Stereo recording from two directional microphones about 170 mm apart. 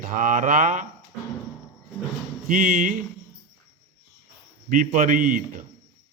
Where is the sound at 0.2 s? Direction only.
50° right (ahead or behind).